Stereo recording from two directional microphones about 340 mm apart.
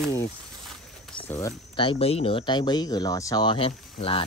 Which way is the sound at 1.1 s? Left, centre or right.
Centre.